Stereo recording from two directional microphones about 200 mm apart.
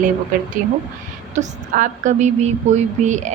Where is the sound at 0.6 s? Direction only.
40° right (ahead or behind).